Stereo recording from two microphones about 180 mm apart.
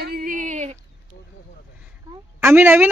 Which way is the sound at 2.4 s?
10° right (ahead or behind).